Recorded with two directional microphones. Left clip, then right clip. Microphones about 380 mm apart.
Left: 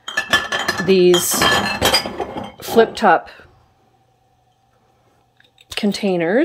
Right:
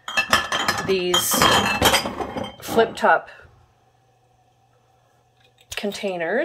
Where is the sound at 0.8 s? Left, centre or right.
Left.